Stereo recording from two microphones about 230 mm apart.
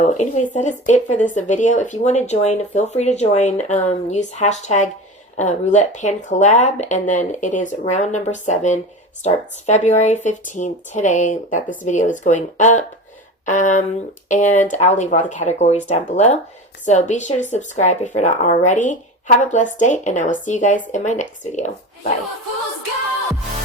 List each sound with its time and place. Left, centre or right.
0.0 s speech: left